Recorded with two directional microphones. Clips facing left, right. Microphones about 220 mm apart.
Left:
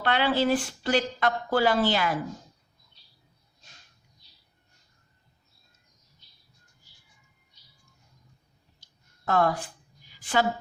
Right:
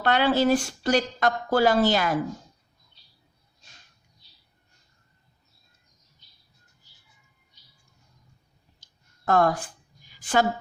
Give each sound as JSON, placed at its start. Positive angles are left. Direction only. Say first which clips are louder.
{"t": 0.0, "sound": "a woman's voice", "louder": "right 3 dB", "side_deg": -45}
{"t": 9.2, "sound": "a woman's voice", "louder": "right 3 dB", "side_deg": -45}
{"t": 10.2, "sound": "a sound", "louder": "right 3 dB", "side_deg": -45}